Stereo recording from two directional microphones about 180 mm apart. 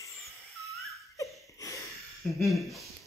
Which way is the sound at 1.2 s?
15° left (ahead or behind).